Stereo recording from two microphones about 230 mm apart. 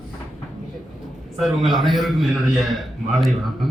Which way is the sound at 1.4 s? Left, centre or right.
Centre.